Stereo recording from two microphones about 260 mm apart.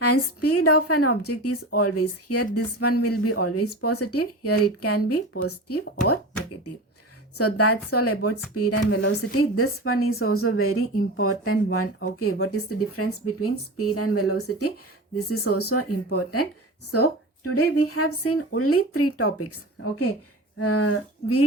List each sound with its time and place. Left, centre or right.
0.0 s a woman's voice: left
7.3 s a woman's voice: left